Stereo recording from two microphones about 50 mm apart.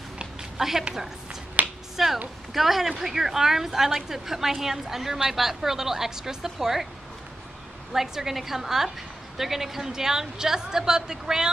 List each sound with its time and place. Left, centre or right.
0.2 s a sound: centre
1.6 s finger snapping: right
2.0 s a woman's voice: centre
7.9 s a woman's voice: centre